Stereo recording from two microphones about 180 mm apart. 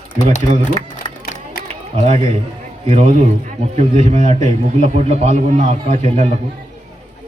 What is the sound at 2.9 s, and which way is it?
A man's voice, 40° right (ahead or behind).